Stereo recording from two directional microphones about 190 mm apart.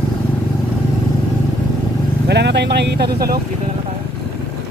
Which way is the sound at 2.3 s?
65° right (ahead or behind).